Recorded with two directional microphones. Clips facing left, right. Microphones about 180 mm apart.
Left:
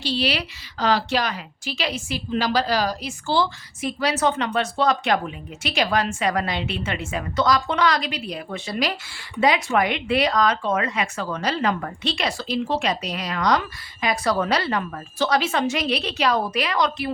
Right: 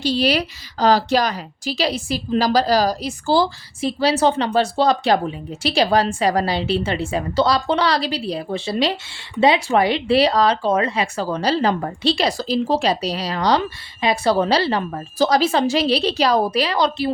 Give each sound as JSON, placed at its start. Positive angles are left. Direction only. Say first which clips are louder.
{"t": 0.0, "sound": "a woman's voice", "louder": "right 6 dB", "side_deg": -45}